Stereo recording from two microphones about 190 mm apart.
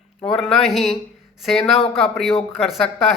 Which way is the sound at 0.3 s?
Centre (ahead or behind).